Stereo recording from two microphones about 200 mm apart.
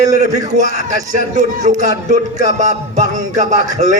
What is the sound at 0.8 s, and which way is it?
A man's voice, 40° right (ahead or behind).